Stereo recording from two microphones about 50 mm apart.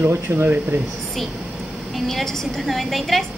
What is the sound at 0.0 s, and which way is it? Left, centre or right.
Speech, right.